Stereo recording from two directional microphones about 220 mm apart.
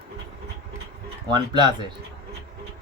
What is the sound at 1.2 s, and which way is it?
Speech, 20° right (ahead or behind).